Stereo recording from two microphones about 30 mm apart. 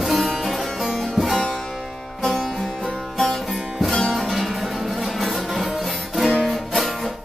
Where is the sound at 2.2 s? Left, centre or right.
Centre.